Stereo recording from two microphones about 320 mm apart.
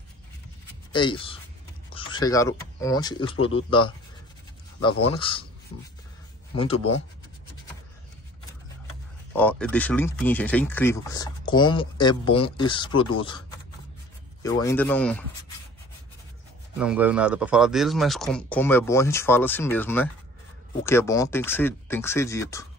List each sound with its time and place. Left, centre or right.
0.9 s speech: centre
6.5 s speech: centre
9.3 s speech: centre
14.4 s a man's voice: centre
16.7 s a man's voice: centre